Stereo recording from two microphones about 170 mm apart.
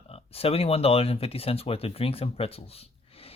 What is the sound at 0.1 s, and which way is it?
Speech, 35° left (ahead or behind).